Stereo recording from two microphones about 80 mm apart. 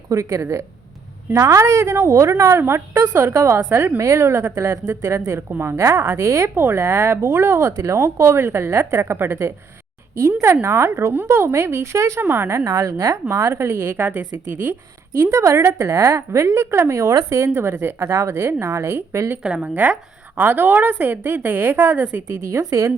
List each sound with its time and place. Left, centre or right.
0.1 s a woman's voice: right
12.5 s a woman's voice: right
19.4 s a woman's voice: centre
22.4 s a woman's voice: right